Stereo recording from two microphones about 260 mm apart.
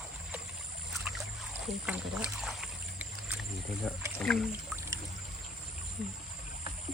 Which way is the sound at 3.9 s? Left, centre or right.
Centre.